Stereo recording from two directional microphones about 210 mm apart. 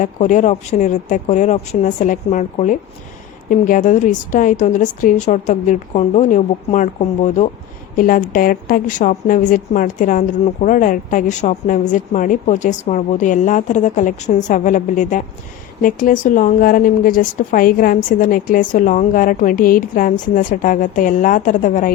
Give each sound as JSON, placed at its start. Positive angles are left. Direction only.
{"t": 0.0, "sound": "a woman's voice", "side_deg": 35}